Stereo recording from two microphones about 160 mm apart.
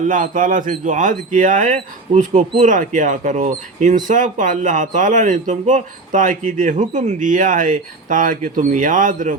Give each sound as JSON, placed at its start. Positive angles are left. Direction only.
{"t": 0.1, "sound": "speech", "side_deg": -55}